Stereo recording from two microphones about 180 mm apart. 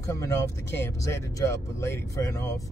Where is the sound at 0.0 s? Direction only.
15° left (ahead or behind).